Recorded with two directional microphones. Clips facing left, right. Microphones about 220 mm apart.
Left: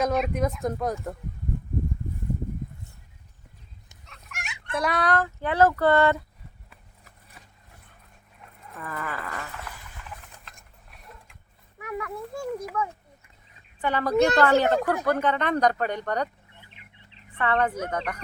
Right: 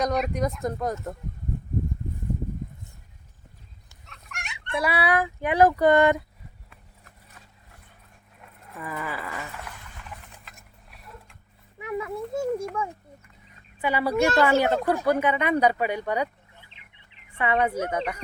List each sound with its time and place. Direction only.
0.0 s speech: 5° left (ahead or behind)
4.0 s dog: centre (ahead or behind)
4.6 s fowl: centre (ahead or behind)
8.8 s a sound: 10° right (ahead or behind)
11.8 s a child's voice: 25° right (ahead or behind)
13.8 s fowl: 10° right (ahead or behind)
16.6 s bird: 25° right (ahead or behind)
17.3 s fowl: 10° right (ahead or behind)